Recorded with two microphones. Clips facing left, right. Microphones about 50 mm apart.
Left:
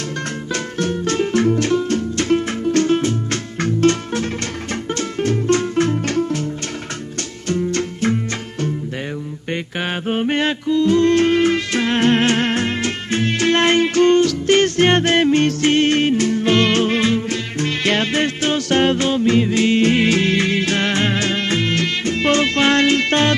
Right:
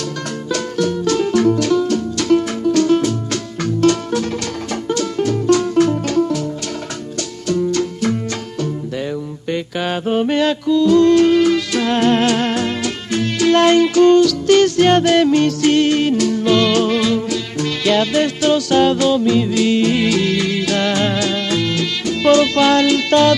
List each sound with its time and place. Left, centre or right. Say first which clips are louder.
0.5 s music: right 4 dB; left
7.4 s music: right 3 dB; left